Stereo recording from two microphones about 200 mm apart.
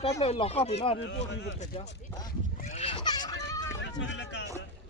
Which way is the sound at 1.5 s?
35° left (ahead or behind).